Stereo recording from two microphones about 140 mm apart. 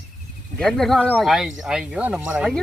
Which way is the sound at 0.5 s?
5° left (ahead or behind).